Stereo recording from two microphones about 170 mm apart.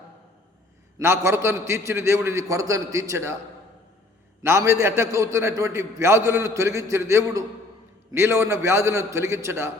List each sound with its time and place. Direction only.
0.9 s a man's voice: 15° right (ahead or behind)
4.4 s a man's voice: 15° right (ahead or behind)